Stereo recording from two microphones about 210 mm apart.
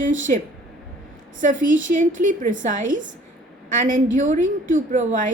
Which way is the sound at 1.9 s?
40° right (ahead or behind).